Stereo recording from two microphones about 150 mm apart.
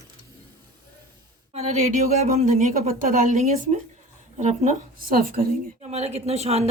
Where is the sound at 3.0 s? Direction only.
50° right (ahead or behind).